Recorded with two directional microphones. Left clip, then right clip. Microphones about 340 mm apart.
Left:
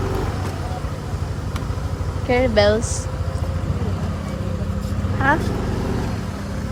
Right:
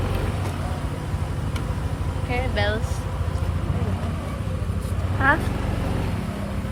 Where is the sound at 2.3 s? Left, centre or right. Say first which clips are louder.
Left 9 dB; centre.